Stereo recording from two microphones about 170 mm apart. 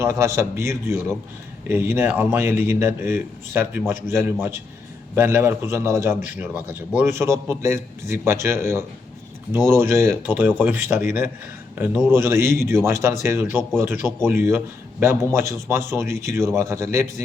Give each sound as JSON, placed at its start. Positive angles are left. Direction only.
{"t": 0.0, "sound": "a man's voice", "side_deg": -15}